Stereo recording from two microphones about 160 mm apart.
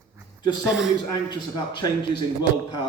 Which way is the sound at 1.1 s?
25° left (ahead or behind).